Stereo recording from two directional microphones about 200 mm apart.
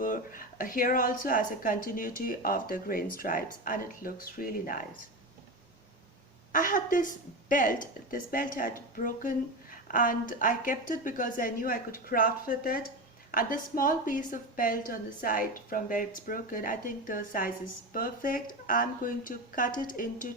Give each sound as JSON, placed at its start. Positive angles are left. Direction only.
{"t": 0.0, "sound": "speech", "side_deg": 40}
{"t": 6.5, "sound": "speech", "side_deg": 40}